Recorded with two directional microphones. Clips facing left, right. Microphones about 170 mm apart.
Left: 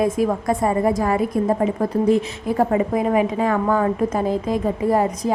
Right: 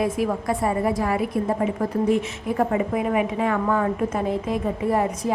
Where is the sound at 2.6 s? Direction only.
35° left (ahead or behind).